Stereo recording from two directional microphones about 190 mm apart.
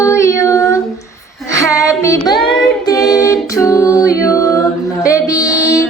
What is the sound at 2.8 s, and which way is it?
A capella, 20° left (ahead or behind).